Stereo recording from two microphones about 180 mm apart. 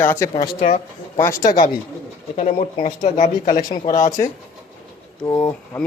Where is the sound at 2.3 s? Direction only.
45° left (ahead or behind).